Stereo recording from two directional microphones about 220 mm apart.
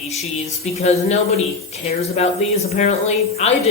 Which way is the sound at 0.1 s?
30° left (ahead or behind).